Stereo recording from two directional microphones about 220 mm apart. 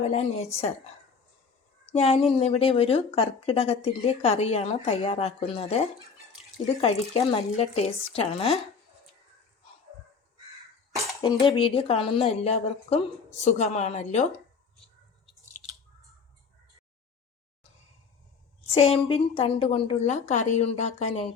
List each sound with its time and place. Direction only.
0.0 s a woman's voice: 30° left (ahead or behind)
1.9 s a woman's voice: 30° left (ahead or behind)
6.8 s a woman's voice: 30° left (ahead or behind)
11.2 s a woman's voice: 20° left (ahead or behind)
18.6 s a woman's voice: 25° left (ahead or behind)